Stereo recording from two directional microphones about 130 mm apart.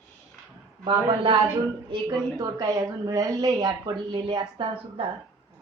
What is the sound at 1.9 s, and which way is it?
A woman's voice, 30° right (ahead or behind).